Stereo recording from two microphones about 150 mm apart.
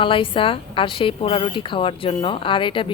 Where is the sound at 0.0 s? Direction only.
35° left (ahead or behind).